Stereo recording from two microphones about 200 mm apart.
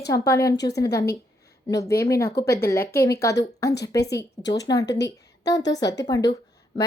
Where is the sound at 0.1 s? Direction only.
15° left (ahead or behind).